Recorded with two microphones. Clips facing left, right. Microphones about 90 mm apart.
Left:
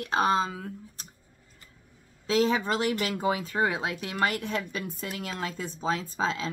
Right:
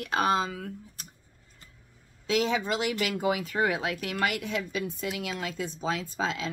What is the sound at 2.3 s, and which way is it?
Speech, 35° left (ahead or behind).